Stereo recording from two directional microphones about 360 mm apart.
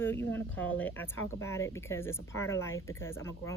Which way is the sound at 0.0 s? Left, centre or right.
Centre.